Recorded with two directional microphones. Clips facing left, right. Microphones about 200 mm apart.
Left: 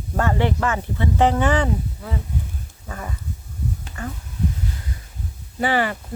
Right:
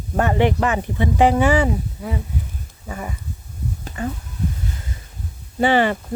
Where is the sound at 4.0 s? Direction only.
20° right (ahead or behind).